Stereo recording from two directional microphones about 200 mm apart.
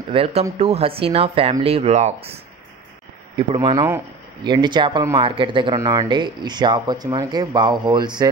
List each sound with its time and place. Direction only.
0.1 s speech: 30° right (ahead or behind)